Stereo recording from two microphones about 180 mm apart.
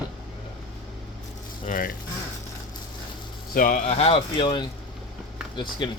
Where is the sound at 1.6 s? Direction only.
50° left (ahead or behind).